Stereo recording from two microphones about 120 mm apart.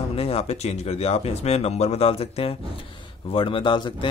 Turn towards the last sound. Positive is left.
turn(degrees=40)  # may be behind; listen again after turning